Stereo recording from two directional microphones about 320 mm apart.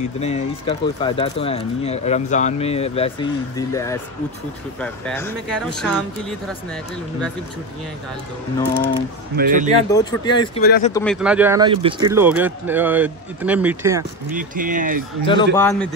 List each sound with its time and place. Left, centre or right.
0.2 s speech: centre
9.4 s speech: right
9.8 s speech: centre
10.6 s speech: left
10.9 s speech: centre
11.1 s speech: centre
14.3 s speech: right
15.2 s speech: centre